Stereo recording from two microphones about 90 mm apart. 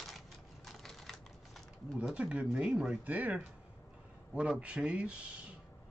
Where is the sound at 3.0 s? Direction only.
20° right (ahead or behind).